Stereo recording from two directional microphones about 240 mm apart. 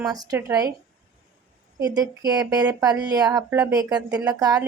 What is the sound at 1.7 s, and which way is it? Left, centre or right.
Speech, centre.